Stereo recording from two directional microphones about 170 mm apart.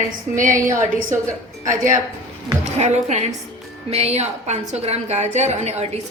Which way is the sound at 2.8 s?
40° right (ahead or behind).